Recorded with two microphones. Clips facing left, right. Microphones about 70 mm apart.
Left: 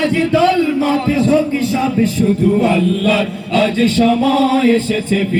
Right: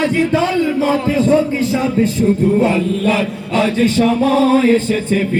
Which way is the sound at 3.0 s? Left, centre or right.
Right.